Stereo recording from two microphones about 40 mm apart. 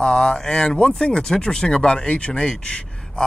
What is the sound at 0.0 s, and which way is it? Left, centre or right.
Speech, centre.